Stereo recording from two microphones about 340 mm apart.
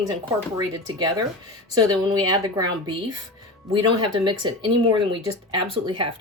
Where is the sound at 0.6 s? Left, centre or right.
Centre.